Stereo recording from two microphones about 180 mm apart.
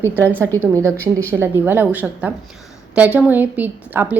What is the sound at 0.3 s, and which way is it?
A woman's voice, 15° right (ahead or behind).